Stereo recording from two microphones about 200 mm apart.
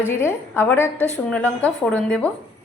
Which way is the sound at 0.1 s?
10° left (ahead or behind).